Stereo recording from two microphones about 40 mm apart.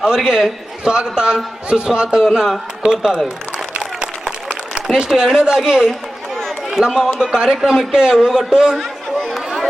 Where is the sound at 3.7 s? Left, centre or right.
Right.